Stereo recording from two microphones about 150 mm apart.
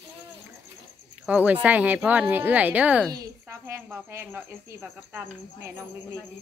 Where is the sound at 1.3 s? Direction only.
10° right (ahead or behind).